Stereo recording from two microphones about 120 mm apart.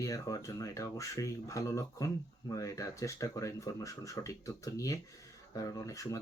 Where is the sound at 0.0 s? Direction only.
30° left (ahead or behind).